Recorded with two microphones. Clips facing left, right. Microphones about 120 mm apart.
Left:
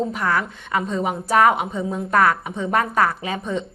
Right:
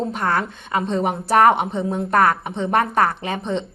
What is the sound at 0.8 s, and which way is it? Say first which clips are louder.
Speech: right 4 dB; 60° right (ahead or behind).